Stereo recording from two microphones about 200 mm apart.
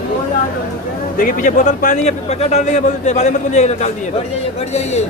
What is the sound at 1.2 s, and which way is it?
A man's voice, 45° left (ahead or behind).